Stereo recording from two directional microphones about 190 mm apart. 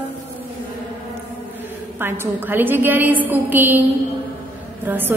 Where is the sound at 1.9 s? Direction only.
10° right (ahead or behind).